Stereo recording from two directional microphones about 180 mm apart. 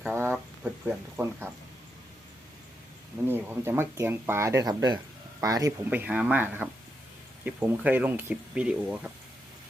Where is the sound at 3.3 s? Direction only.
15° right (ahead or behind).